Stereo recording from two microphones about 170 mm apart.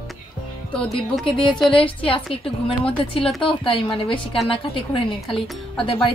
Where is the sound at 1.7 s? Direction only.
30° left (ahead or behind).